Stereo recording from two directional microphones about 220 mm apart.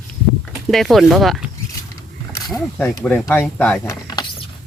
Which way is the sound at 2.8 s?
10° left (ahead or behind).